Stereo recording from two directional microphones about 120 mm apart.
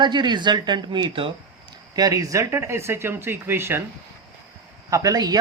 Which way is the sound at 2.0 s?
30° right (ahead or behind).